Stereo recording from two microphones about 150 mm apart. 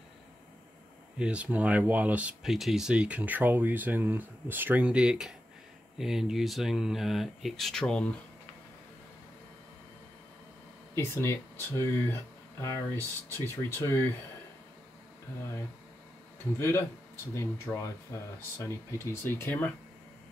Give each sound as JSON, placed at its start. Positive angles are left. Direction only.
{"t": 1.1, "sound": "speech", "side_deg": -5}
{"t": 11.0, "sound": "speech", "side_deg": 15}
{"t": 16.5, "sound": "speech", "side_deg": 15}